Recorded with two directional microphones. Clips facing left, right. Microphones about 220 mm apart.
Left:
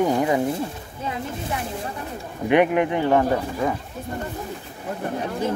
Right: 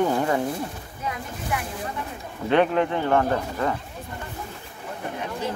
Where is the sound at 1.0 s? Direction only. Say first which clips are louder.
Left 3 dB; 30° left (ahead or behind).